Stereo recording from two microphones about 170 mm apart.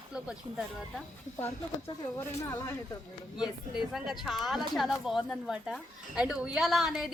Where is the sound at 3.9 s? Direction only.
Centre (ahead or behind).